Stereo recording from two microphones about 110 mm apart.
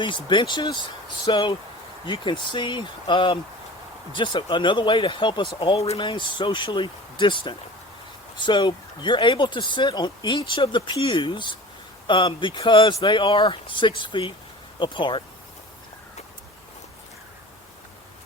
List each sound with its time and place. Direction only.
0.0 s a man's voice: 45° left (ahead or behind)